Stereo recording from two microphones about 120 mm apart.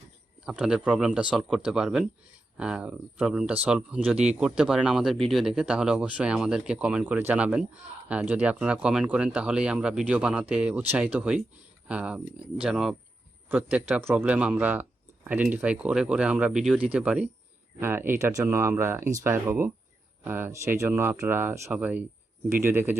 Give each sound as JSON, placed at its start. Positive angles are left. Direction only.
{"t": 0.4, "sound": "speech", "side_deg": -5}
{"t": 13.5, "sound": "speech", "side_deg": -15}